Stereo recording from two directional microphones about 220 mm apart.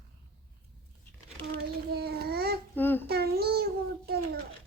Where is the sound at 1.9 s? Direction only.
45° right (ahead or behind).